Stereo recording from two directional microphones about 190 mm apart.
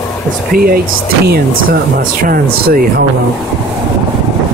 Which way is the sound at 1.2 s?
55° right (ahead or behind).